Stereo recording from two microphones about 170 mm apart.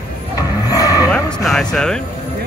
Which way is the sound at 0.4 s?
20° left (ahead or behind).